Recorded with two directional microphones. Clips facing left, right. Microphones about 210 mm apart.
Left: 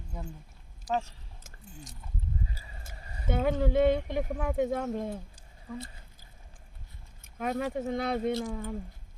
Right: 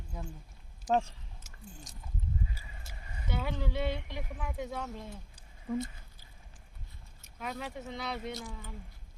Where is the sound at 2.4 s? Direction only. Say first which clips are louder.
Left 1 dB; 35° left (ahead or behind).